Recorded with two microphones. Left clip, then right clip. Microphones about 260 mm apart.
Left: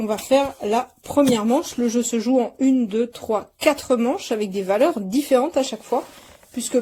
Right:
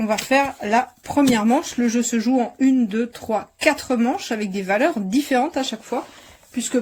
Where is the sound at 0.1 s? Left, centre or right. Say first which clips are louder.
Even; right.